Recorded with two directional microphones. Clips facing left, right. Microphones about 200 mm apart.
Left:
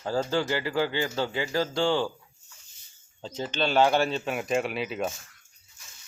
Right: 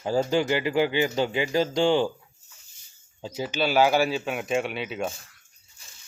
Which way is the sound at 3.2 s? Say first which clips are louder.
Right 2 dB; 10° right (ahead or behind).